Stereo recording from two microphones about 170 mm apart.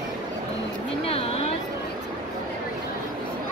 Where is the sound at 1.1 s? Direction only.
35° left (ahead or behind).